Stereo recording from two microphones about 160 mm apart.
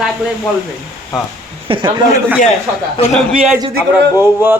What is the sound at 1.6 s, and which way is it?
Speech, 30° right (ahead or behind).